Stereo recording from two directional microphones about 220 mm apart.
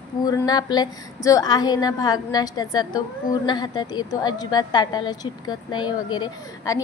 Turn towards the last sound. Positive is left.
turn(degrees=15)  # may be behind; listen again after turning